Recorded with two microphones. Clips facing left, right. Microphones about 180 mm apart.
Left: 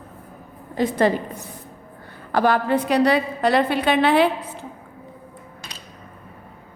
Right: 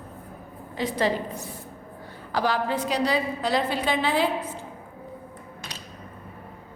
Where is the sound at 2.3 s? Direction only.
55° left (ahead or behind).